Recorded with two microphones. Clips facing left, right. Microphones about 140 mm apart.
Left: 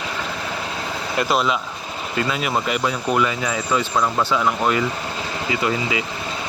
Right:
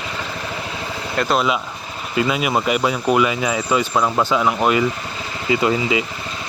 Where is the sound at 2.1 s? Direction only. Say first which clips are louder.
Right 4 dB; 10° right (ahead or behind).